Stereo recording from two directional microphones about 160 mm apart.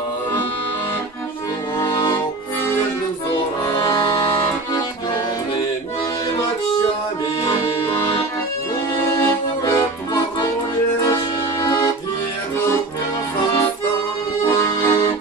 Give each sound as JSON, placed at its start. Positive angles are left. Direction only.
{"t": 1.8, "sound": "music", "side_deg": 20}
{"t": 3.7, "sound": "accordion", "side_deg": 20}
{"t": 9.1, "sound": "accordion", "side_deg": 20}
{"t": 14.5, "sound": "accordion", "side_deg": 15}